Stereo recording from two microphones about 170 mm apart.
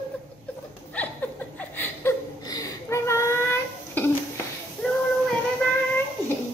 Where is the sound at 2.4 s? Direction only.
20° left (ahead or behind).